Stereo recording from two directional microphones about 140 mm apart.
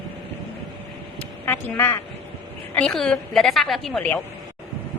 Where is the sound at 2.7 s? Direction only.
5° left (ahead or behind).